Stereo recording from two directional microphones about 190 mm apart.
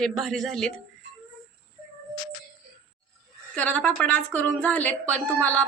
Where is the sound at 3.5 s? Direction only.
5° left (ahead or behind).